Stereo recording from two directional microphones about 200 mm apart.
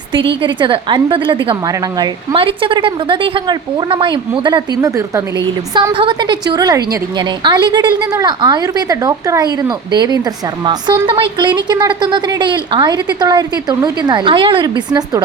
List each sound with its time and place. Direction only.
0.4 s a woman's voice: 25° right (ahead or behind)